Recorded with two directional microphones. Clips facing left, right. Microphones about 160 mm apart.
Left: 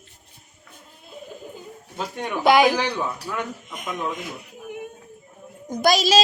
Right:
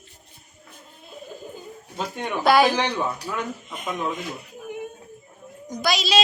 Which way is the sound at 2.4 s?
15° left (ahead or behind).